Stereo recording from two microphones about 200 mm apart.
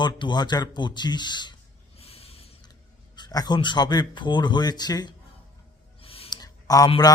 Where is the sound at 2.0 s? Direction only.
30° left (ahead or behind).